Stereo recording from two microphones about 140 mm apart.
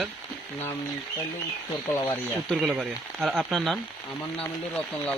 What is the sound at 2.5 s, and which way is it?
Speech, centre (ahead or behind).